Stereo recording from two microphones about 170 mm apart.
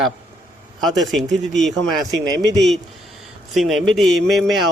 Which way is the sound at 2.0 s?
20° right (ahead or behind).